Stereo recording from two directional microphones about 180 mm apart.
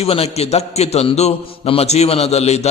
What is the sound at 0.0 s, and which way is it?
A man's voice, 35° left (ahead or behind).